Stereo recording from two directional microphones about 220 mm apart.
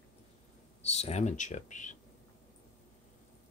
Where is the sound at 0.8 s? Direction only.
30° left (ahead or behind).